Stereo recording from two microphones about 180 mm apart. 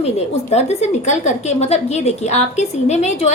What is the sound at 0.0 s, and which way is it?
A woman's voice, 35° left (ahead or behind).